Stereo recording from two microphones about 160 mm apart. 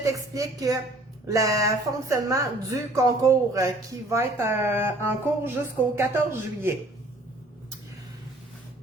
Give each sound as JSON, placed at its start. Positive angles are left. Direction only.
{"t": 0.0, "sound": "a woman's voice", "side_deg": -20}